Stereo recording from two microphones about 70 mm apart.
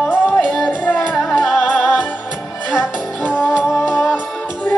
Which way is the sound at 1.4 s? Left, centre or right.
Centre.